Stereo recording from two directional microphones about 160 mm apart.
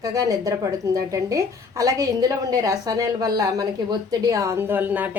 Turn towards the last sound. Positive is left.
turn(degrees=-10)  # may be behind; listen again after turning